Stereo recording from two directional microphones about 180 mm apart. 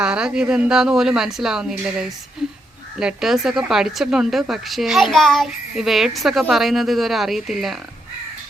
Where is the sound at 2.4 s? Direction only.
Centre (ahead or behind).